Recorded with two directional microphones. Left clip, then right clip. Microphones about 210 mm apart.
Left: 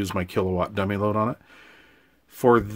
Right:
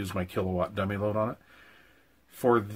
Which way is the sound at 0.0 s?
45° left (ahead or behind).